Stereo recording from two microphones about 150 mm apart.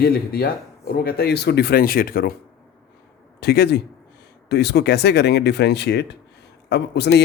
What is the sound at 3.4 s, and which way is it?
A man's voice, 90° left.